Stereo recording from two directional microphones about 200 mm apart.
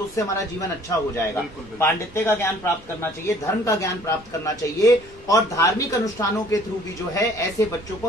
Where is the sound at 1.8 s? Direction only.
10° left (ahead or behind).